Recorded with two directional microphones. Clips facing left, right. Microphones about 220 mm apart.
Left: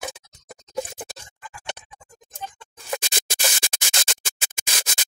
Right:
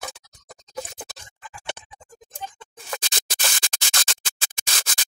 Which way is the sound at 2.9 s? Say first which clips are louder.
Left 4 dB; 10° left (ahead or behind).